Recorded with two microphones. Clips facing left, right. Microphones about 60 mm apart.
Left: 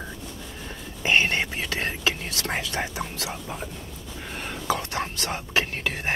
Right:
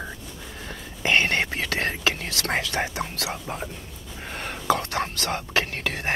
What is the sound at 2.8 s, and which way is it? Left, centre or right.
Speech, right.